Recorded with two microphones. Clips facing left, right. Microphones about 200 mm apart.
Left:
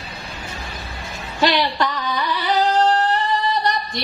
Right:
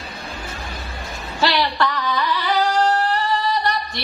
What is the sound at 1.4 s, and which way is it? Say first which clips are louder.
Singing: left 1 dB; 15° left (ahead or behind).